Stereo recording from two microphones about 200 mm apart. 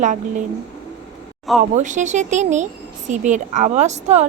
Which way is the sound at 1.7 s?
40° right (ahead or behind).